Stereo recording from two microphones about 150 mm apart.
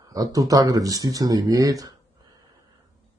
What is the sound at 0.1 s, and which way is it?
Speech, 25° right (ahead or behind).